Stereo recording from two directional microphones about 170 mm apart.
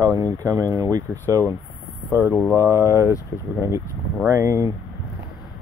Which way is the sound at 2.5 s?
15° right (ahead or behind).